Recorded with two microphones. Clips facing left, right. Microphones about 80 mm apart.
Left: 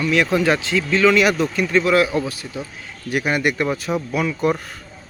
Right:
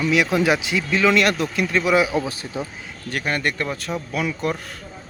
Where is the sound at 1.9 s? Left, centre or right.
Centre.